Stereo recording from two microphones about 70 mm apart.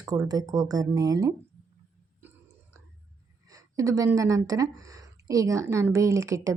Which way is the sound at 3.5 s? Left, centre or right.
Right.